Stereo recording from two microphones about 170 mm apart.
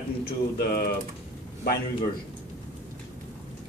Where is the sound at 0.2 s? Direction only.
65° left (ahead or behind).